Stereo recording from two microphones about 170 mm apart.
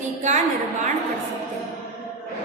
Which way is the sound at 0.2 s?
45° right (ahead or behind).